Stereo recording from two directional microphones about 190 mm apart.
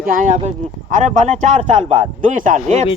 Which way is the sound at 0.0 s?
45° right (ahead or behind).